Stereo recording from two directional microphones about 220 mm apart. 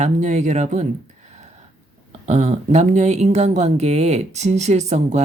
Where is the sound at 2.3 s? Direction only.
30° right (ahead or behind).